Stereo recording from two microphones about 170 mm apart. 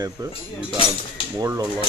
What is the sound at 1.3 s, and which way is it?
Speech, 20° right (ahead or behind).